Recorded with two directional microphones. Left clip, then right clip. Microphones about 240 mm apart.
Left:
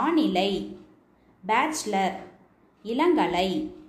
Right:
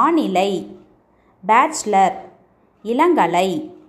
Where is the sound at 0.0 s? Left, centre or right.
Right.